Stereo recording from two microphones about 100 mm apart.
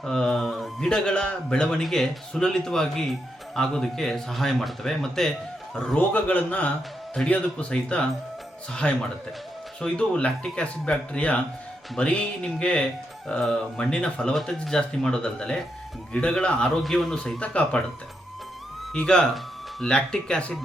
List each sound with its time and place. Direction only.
0.0 s speech: 5° left (ahead or behind)
18.9 s speech: 10° left (ahead or behind)